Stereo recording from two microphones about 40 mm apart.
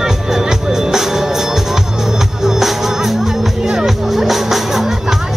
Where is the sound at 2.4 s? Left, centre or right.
Centre.